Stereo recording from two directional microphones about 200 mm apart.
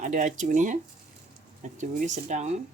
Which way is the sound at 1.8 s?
35° right (ahead or behind).